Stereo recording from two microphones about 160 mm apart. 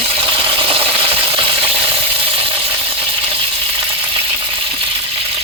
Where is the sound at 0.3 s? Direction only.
35° right (ahead or behind).